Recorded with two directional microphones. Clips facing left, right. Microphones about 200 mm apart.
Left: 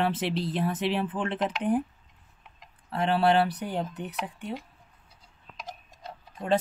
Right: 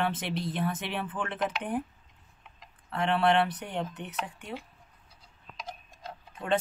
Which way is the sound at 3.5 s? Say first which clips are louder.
Left 3 dB; centre (ahead or behind).